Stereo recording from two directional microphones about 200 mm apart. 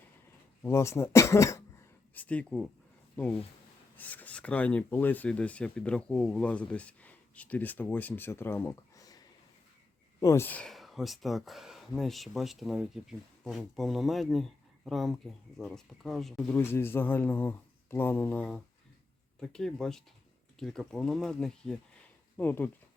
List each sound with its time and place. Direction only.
0.6 s speech: 15° left (ahead or behind)
16.6 s speech: 10° left (ahead or behind)